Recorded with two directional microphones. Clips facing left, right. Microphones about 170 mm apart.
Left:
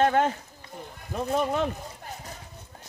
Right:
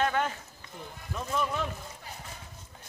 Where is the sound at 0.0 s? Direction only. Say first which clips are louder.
Left 6 dB; 40° left (ahead or behind).